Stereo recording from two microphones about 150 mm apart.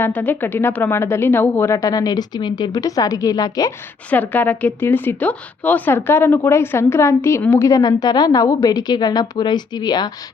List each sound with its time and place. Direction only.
0.0 s a woman's voice: 10° left (ahead or behind)
4.1 s a woman's voice: 10° left (ahead or behind); by 10.1 s 25° left (ahead or behind)